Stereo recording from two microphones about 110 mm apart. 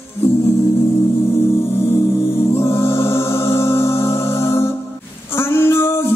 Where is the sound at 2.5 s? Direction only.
25° left (ahead or behind).